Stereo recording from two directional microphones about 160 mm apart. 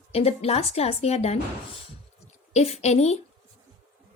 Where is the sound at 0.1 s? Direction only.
40° left (ahead or behind).